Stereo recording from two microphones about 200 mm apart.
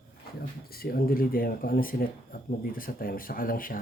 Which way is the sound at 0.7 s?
50° left (ahead or behind).